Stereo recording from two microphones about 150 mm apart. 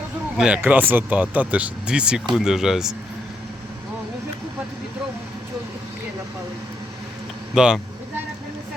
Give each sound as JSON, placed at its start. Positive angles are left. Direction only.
{"t": 0.3, "sound": "speech", "side_deg": -5}
{"t": 7.5, "sound": "speech", "side_deg": -5}